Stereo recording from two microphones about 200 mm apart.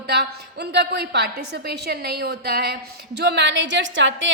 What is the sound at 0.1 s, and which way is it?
A woman's voice, 55° right (ahead or behind).